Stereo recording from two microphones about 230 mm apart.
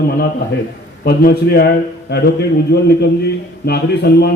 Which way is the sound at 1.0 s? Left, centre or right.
Left.